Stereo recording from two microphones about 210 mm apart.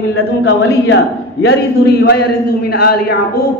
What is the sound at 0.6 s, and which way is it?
A man's voice, 55° left (ahead or behind).